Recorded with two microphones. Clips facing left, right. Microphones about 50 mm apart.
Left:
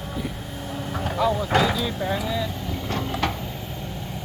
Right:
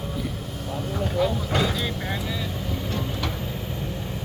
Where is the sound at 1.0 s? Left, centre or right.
Left.